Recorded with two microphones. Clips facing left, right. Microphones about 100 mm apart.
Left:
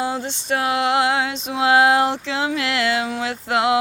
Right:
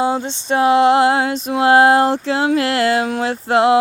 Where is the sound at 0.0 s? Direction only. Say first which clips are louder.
Right 6 dB; 25° right (ahead or behind); by 3.3 s 45° right (ahead or behind).